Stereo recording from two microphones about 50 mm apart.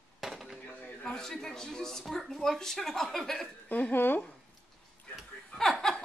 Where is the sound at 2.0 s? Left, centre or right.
Centre.